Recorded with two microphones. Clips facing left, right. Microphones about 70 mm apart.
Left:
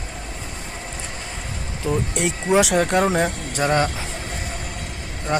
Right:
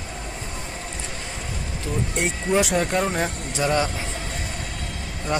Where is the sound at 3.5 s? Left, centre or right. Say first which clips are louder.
Left 1 dB; left.